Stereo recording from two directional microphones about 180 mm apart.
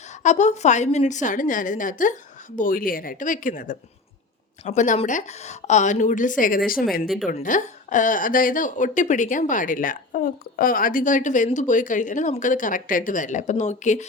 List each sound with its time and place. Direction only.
0.1 s a woman's voice: 40° left (ahead or behind)